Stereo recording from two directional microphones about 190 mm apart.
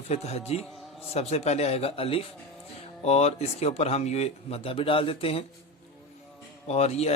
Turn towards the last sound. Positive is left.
turn(degrees=35)  # may be behind; listen again after turning